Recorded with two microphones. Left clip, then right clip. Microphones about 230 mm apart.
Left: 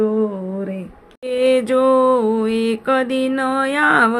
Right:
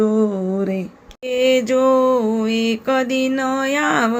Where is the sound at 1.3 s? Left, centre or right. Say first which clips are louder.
Even; centre.